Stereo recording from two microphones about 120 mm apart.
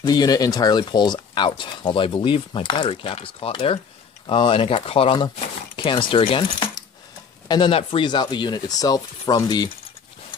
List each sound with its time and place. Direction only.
0.0 s speech: 35° left (ahead or behind)